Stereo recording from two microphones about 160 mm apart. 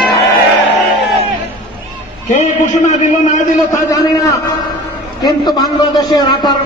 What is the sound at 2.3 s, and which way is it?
A man's voice, 50° left (ahead or behind).